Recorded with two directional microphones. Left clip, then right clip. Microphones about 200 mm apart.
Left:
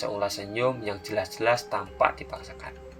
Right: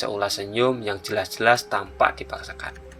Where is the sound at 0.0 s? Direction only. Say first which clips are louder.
Right 4 dB; 35° right (ahead or behind).